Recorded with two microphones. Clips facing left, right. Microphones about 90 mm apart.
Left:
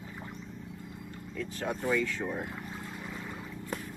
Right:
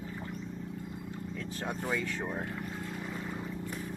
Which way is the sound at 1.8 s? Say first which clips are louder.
Left 5 dB; 20° right (ahead or behind).